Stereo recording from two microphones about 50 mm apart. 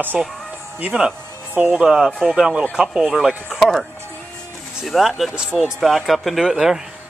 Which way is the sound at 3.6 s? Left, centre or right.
Centre.